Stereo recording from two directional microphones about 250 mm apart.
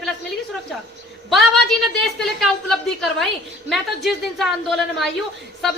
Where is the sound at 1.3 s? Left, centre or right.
Centre.